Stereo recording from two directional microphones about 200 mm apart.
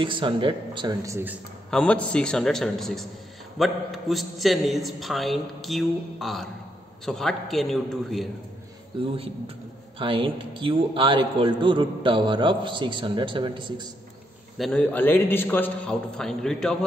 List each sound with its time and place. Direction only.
0.0 s a man's voice: 25° right (ahead or behind)
1.7 s a man's voice: 5° left (ahead or behind)
9.0 s a man's voice: 25° right (ahead or behind)
14.6 s a man's voice: 5° left (ahead or behind)